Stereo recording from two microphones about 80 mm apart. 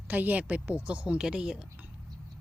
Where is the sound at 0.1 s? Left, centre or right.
Right.